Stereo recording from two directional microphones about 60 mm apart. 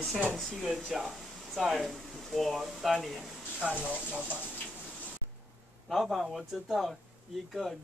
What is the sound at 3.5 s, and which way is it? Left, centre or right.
Speech, right.